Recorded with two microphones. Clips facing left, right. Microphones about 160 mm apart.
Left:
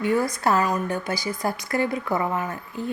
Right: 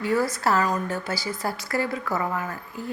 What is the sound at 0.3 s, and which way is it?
A woman's voice, 20° left (ahead or behind).